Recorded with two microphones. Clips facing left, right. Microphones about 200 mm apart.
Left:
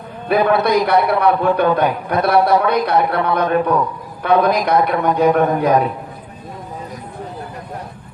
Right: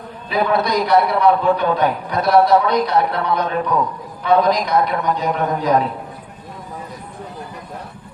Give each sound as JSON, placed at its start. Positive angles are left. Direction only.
{"t": 0.3, "sound": "a man's voice", "side_deg": 55}